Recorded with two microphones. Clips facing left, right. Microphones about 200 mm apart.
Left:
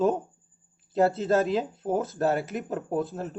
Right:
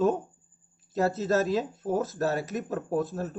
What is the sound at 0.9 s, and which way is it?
Speech, 30° left (ahead or behind).